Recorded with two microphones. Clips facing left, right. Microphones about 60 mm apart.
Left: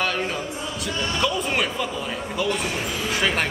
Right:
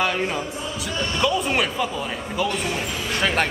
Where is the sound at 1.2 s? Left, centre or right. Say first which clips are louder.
Right 3 dB; centre.